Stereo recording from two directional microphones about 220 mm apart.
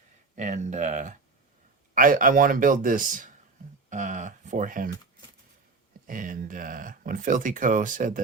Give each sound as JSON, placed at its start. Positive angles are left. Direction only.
{"t": 0.3, "sound": "speech", "side_deg": -30}
{"t": 6.1, "sound": "speech", "side_deg": -35}